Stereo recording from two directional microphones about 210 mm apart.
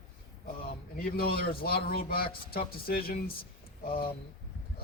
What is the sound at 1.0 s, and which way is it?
Speech, 45° left (ahead or behind).